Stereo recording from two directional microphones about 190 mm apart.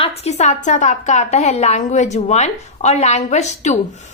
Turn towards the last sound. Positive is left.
turn(degrees=40)  # may be behind; listen again after turning